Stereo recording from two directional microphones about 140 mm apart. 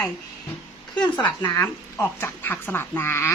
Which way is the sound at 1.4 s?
20° left (ahead or behind).